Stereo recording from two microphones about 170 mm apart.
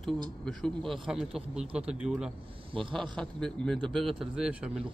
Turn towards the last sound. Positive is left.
turn(degrees=-5)  # may be behind; listen again after turning